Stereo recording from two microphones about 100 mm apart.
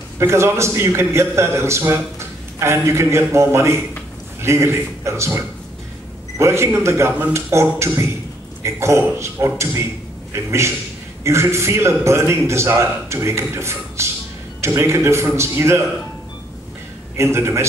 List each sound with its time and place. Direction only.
0.2 s a man's voice: 25° right (ahead or behind)
17.2 s a man's voice: 25° right (ahead or behind)